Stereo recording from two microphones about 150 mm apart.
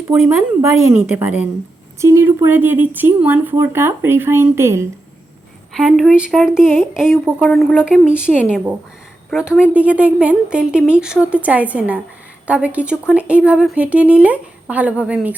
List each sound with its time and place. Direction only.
0.1 s speech: 15° right (ahead or behind)
5.7 s a woman's voice: centre (ahead or behind)
7.9 s speech: 5° right (ahead or behind)